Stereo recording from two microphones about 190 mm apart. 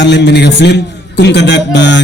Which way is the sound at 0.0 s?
65° left (ahead or behind).